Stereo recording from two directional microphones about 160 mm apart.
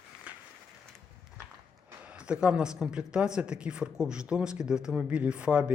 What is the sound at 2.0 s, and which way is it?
Speech, 5° right (ahead or behind).